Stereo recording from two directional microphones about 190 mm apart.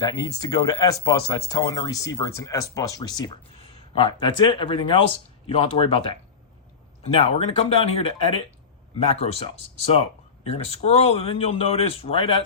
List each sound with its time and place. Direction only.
0.0 s speech: 20° left (ahead or behind)